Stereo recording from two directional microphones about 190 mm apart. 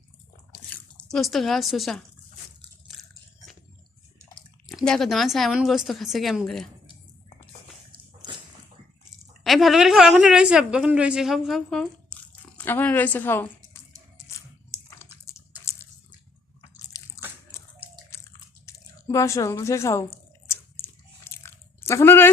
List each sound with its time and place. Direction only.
0.7 s speech: 5° left (ahead or behind)
2.9 s biting: centre (ahead or behind)
4.6 s a woman's voice: centre (ahead or behind)
9.4 s a woman's voice: centre (ahead or behind)
15.3 s a sound: 15° left (ahead or behind)
16.9 s a sound: 20° left (ahead or behind)
18.1 s biting: 15° left (ahead or behind)
18.6 s speech: 15° left (ahead or behind)
20.7 s biting: 15° left (ahead or behind)